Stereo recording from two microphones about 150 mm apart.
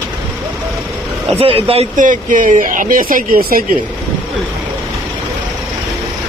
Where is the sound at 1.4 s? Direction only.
40° right (ahead or behind).